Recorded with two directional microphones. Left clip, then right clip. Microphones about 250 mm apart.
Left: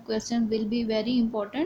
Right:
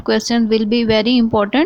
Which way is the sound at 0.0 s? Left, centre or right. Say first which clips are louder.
Right 12 dB; right.